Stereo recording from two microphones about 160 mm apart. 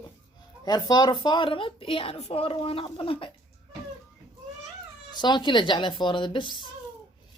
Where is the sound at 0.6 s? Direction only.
25° left (ahead or behind).